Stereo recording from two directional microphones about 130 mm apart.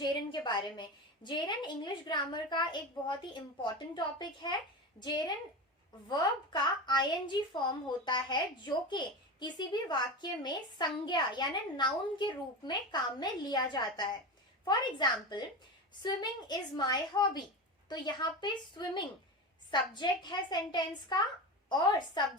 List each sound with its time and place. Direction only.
0.0 s a woman's voice: 35° left (ahead or behind)